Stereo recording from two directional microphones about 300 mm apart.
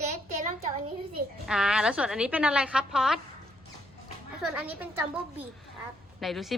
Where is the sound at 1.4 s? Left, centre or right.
Centre.